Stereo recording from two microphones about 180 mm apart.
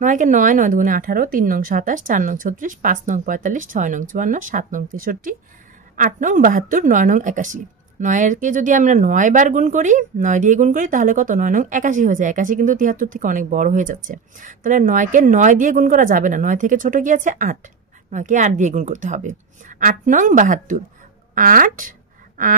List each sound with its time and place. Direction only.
0.0 s a woman's voice: 45° right (ahead or behind)